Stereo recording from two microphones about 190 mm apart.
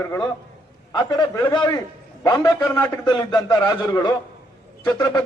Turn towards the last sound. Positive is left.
turn(degrees=20)  # may be behind; listen again after turning